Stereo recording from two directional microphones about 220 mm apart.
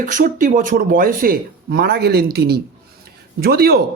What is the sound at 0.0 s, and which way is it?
A man's voice, 40° right (ahead or behind).